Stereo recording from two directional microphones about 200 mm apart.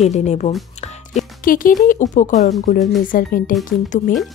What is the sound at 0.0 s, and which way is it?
A woman's voice, 35° left (ahead or behind).